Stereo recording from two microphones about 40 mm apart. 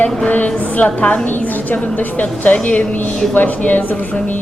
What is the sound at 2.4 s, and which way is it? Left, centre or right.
A woman's voice, left.